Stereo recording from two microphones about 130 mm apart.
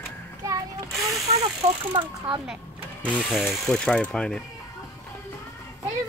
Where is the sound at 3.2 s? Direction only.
Centre (ahead or behind).